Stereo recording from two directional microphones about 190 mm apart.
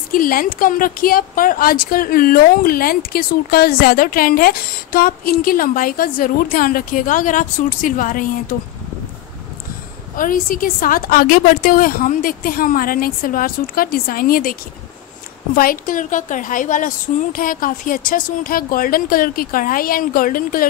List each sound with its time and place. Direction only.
0.1 s a woman's voice: 50° left (ahead or behind)
10.1 s a woman's voice: 45° left (ahead or behind)